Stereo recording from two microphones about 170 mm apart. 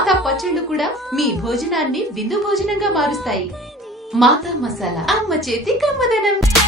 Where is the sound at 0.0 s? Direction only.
Centre (ahead or behind).